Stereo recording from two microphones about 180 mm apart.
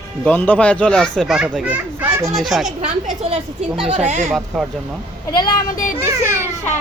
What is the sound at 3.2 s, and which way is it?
Speech, 35° right (ahead or behind).